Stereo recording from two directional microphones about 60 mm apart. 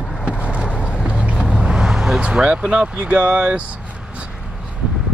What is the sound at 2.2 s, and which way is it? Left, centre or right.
Speech, centre.